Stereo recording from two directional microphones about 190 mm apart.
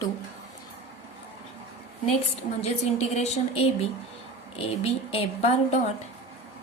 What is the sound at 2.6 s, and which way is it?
A woman's voice, 35° left (ahead or behind).